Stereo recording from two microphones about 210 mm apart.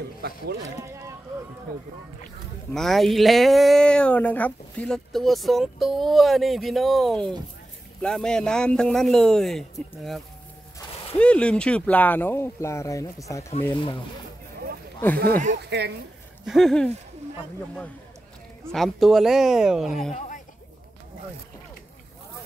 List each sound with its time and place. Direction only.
1.7 s speech: 45° right (ahead or behind)
2.7 s speech: centre (ahead or behind); by 14.0 s 25° left (ahead or behind)
15.5 s speech: 50° right (ahead or behind)
16.4 s speech: centre (ahead or behind)
18.7 s speech: centre (ahead or behind)